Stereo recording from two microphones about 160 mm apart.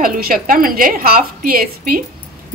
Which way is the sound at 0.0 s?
65° right (ahead or behind).